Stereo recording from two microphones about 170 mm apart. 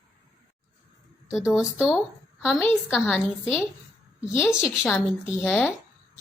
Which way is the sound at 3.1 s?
5° right (ahead or behind).